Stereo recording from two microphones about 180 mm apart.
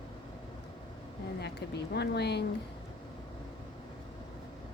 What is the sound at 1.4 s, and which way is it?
Speech, 70° left (ahead or behind).